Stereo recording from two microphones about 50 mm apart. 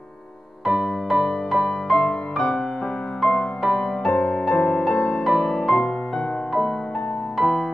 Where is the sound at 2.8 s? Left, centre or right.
Centre.